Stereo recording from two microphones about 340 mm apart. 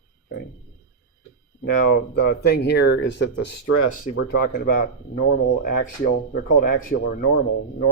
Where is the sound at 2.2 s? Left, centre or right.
Left.